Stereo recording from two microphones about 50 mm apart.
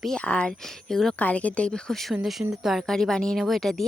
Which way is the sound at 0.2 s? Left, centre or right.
Left.